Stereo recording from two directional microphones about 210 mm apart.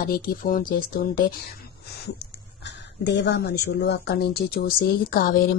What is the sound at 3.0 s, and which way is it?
Speech, 55° left (ahead or behind).